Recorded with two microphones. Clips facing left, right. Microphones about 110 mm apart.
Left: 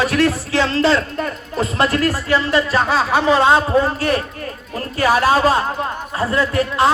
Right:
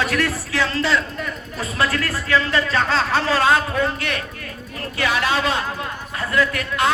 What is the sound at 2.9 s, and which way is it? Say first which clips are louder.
A man's voice: left 4 dB; 15° left (ahead or behind).